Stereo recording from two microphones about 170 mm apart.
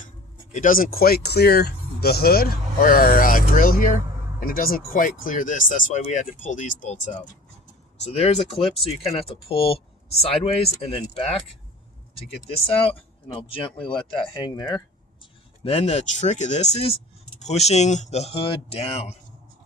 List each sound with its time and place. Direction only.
0.5 s speech: 50° left (ahead or behind); by 11.3 s 35° left (ahead or behind)
12.5 s speech: 35° left (ahead or behind)
15.2 s speech: 35° left (ahead or behind)